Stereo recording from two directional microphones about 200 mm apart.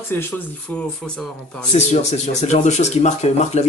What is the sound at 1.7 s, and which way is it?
Speech, 35° left (ahead or behind).